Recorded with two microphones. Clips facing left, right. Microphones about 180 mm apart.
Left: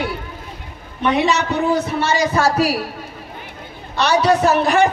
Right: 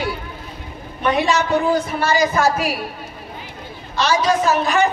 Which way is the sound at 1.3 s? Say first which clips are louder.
Right 1 dB; 70° left (ahead or behind).